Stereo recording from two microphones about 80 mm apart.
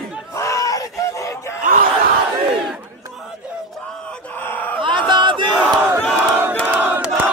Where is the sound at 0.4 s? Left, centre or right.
Left.